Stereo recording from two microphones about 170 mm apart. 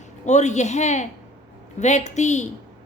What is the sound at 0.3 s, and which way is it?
Speech, 45° left (ahead or behind).